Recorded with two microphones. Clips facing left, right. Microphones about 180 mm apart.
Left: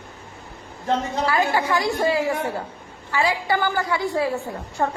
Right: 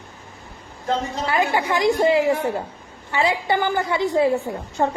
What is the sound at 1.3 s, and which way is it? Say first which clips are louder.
A woman's voice: right 1 dB; 20° right (ahead or behind).